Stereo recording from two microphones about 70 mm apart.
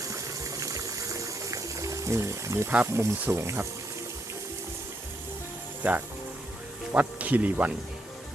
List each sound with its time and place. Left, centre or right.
0.1 s water: right
2.8 s speech: right
5.8 s speech: right